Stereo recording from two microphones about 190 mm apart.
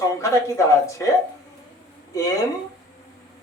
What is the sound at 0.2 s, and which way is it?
Speech, 15° left (ahead or behind).